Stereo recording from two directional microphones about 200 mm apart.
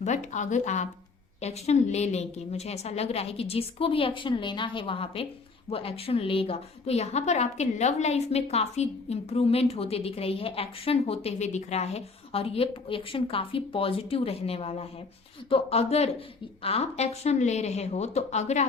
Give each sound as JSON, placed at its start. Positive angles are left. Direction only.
{"t": 0.0, "sound": "a woman's voice", "side_deg": 35}